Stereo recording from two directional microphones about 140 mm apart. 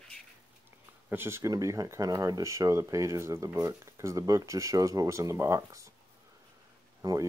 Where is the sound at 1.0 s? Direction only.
15° right (ahead or behind).